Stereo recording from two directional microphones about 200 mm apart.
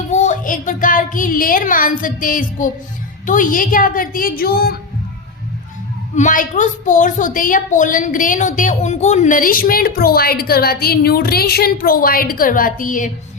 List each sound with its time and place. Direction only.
0.1 s a woman's voice: 40° left (ahead or behind)
6.1 s a woman's voice: 40° left (ahead or behind)